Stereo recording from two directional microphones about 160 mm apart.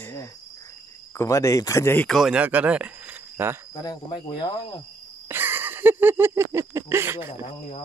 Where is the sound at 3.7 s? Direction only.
25° left (ahead or behind).